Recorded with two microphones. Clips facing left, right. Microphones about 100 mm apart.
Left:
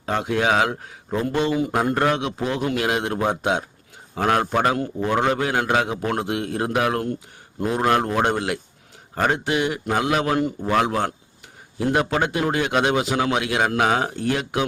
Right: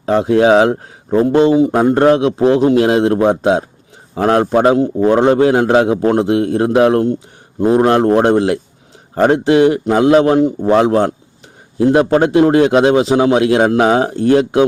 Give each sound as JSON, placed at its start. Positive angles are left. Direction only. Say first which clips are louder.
{"t": 0.0, "sound": "a man's voice", "louder": "right 11 dB", "side_deg": -30}